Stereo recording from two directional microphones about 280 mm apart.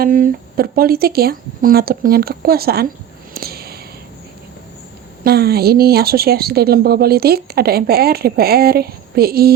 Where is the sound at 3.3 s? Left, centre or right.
Right.